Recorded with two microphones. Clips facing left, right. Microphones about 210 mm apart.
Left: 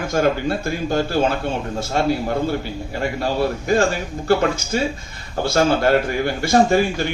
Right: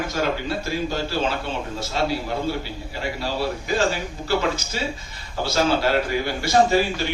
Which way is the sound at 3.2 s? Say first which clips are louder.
Left 5 dB; 50° left (ahead or behind).